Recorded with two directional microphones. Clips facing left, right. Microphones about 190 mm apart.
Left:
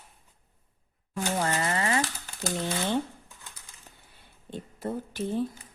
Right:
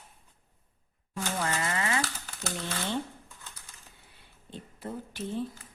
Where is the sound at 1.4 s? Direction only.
35° left (ahead or behind).